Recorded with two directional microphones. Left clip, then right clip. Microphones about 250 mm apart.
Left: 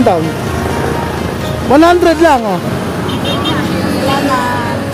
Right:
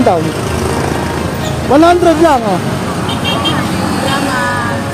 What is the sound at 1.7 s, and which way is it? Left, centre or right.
Speech, left.